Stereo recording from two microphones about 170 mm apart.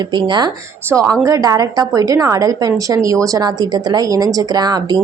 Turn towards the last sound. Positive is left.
turn(degrees=-20)  # may be behind; listen again after turning